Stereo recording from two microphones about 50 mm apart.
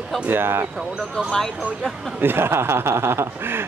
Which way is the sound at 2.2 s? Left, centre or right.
Right.